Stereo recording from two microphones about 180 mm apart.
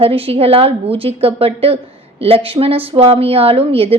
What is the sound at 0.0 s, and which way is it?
A woman's voice, 30° right (ahead or behind).